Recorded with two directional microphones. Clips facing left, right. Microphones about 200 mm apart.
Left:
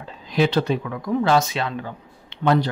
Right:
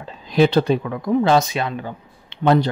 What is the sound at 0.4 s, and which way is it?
Speech, 30° right (ahead or behind).